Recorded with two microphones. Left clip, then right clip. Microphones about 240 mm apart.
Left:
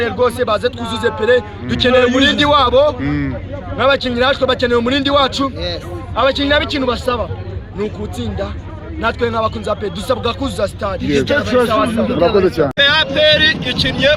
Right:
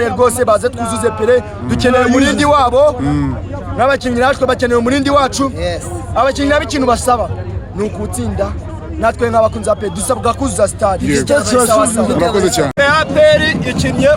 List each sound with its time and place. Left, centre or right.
0.0 s a man's voice: centre
3.8 s speech: centre
5.5 s a man's voice: centre
6.1 s speech: centre
11.1 s a man's voice: right